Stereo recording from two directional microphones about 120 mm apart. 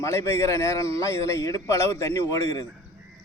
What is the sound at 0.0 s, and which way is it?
A man's voice, 25° left (ahead or behind).